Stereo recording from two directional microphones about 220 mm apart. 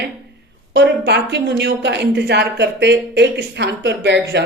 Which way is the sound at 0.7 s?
50° right (ahead or behind).